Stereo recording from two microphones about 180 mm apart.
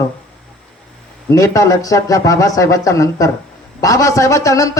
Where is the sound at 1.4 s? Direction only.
15° left (ahead or behind).